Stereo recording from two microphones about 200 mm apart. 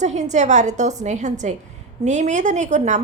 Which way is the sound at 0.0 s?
35° right (ahead or behind).